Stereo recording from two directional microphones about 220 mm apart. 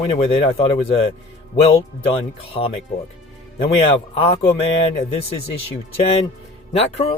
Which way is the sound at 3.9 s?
30° left (ahead or behind).